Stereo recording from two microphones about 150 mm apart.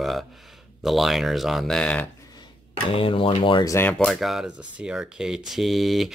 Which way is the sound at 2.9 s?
35° left (ahead or behind).